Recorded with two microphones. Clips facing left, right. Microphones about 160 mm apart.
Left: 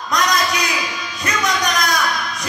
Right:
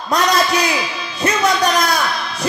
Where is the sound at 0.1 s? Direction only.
30° right (ahead or behind).